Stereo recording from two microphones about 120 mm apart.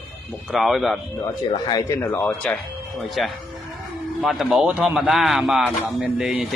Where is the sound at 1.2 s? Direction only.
35° left (ahead or behind).